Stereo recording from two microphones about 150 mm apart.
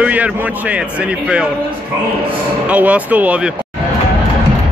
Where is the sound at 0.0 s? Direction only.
10° right (ahead or behind).